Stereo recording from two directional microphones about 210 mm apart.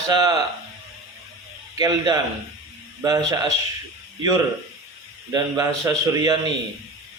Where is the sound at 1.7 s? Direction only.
15° right (ahead or behind).